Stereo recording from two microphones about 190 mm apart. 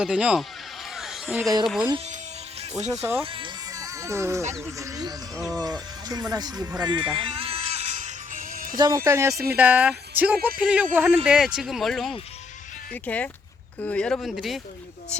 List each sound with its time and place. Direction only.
0.0 s speech: 5° right (ahead or behind)
0.9 s a sound: centre (ahead or behind)
1.6 s speech: centre (ahead or behind)
2.9 s speech: 15° right (ahead or behind)
3.2 s music: 25° right (ahead or behind)
4.6 s speech: 15° right (ahead or behind)
6.7 s music: 25° right (ahead or behind); by 8.8 s 45° right (ahead or behind)
9.0 s speech: 15° right (ahead or behind)